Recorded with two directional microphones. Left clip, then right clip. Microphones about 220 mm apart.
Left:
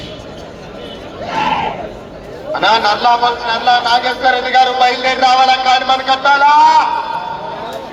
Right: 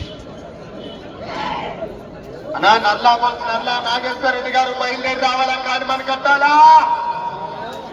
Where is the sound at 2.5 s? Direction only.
30° left (ahead or behind).